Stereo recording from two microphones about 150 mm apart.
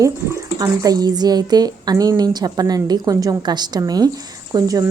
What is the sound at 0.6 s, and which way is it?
Speech, 25° right (ahead or behind).